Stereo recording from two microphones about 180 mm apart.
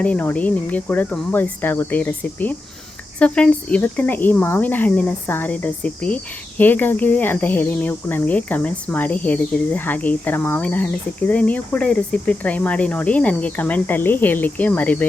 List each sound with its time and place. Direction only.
0.0 s speech: 10° left (ahead or behind)